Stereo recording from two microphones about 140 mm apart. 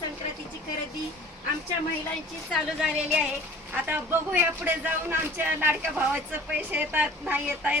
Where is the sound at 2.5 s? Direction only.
Centre (ahead or behind).